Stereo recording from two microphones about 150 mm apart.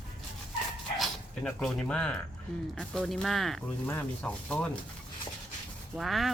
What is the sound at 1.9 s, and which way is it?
Speech, 5° left (ahead or behind).